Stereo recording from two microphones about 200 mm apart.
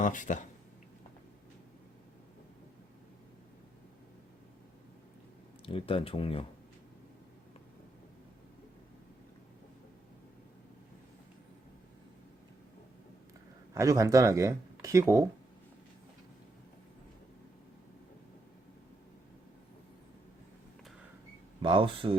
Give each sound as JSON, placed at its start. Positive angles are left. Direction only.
{"t": 0.0, "sound": "speech", "side_deg": 40}
{"t": 5.6, "sound": "speech", "side_deg": 25}
{"t": 13.7, "sound": "speech", "side_deg": -15}
{"t": 21.6, "sound": "speech", "side_deg": -25}